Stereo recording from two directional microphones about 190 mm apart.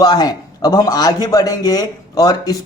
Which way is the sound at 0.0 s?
20° left (ahead or behind).